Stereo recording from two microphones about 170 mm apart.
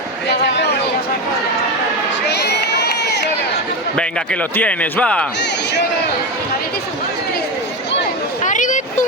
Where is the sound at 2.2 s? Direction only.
85° left.